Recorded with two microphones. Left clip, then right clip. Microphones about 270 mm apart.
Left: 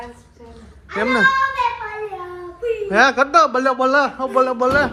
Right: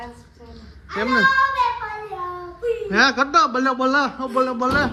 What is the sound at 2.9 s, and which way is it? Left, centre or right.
Speech, centre.